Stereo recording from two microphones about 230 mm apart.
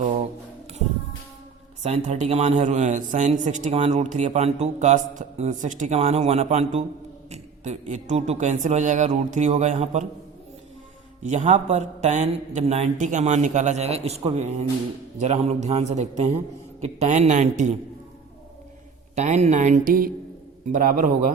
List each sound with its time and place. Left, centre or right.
0.0 s music: right
1.8 s a man's voice: right
11.2 s a man's voice: right
19.1 s a man's voice: right